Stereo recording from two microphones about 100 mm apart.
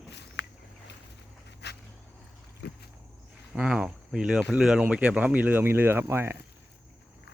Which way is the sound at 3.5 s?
10° right (ahead or behind).